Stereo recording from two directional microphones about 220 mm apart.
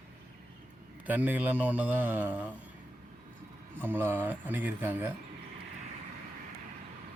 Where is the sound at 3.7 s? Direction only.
10° right (ahead or behind).